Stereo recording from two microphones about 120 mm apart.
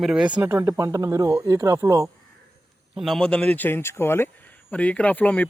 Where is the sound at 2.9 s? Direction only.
Centre (ahead or behind).